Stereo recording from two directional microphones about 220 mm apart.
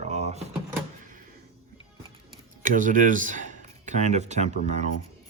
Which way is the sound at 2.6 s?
35° right (ahead or behind).